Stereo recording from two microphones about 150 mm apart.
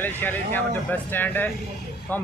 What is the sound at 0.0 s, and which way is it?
Speech, 15° left (ahead or behind).